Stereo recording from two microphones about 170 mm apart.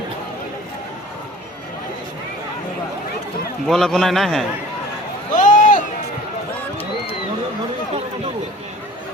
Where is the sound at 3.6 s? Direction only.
Centre (ahead or behind).